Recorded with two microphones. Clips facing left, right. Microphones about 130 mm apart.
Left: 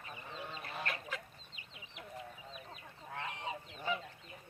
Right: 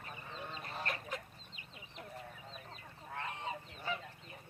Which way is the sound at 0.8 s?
40° right (ahead or behind).